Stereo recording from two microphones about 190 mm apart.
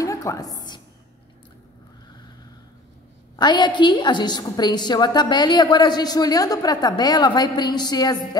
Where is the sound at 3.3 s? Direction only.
25° left (ahead or behind).